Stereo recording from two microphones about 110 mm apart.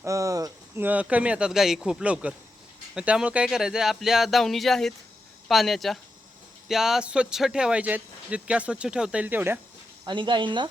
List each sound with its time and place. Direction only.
0.0 s speech: 30° right (ahead or behind)
0.8 s speech: 15° right (ahead or behind)
10.1 s speech: 45° right (ahead or behind)